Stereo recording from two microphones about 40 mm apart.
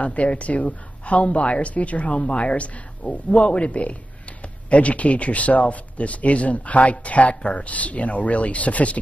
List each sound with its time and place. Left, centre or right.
0.0 s speech: left